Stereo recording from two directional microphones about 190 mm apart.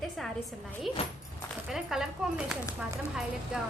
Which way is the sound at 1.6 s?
Centre (ahead or behind).